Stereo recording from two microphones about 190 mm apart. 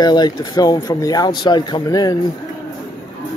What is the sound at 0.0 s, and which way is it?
Speech, 20° left (ahead or behind).